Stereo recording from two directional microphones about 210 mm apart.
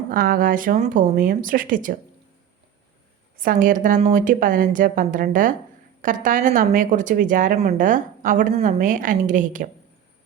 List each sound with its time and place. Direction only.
0.1 s speech: 45° right (ahead or behind)
3.3 s speech: 40° right (ahead or behind)